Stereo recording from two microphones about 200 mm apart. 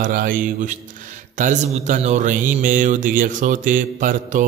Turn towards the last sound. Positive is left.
turn(degrees=-40)  # may be behind; listen again after turning